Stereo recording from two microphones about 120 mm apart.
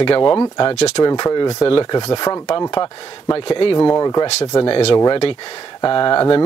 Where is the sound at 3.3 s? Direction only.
50° left (ahead or behind).